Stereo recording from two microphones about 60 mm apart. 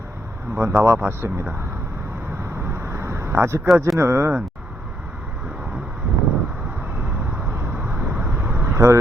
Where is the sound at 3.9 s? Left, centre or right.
Right.